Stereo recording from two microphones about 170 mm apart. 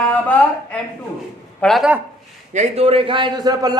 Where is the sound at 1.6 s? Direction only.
Centre (ahead or behind).